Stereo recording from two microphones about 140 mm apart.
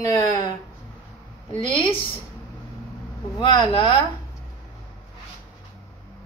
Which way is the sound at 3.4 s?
35° left (ahead or behind).